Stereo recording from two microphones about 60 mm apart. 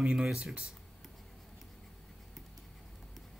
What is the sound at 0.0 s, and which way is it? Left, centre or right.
Speech, centre.